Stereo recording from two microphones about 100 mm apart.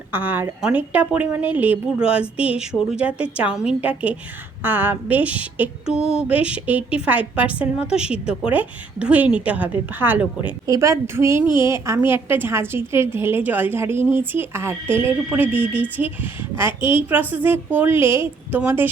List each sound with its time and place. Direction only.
0.1 s a woman's voice: 20° right (ahead or behind)
10.7 s speech: 30° right (ahead or behind)